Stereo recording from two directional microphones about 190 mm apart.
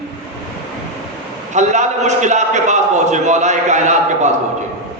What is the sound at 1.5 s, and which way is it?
A man's voice, 40° right (ahead or behind).